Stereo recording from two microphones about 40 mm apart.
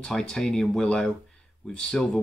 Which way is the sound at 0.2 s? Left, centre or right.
Centre.